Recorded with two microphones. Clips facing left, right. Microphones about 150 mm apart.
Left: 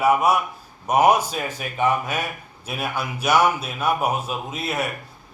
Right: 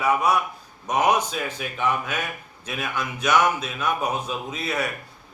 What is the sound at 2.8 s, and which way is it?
A man's voice, 10° left (ahead or behind).